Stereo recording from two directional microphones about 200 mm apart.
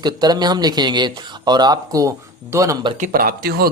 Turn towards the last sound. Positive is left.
turn(degrees=-50)  # may be behind; listen again after turning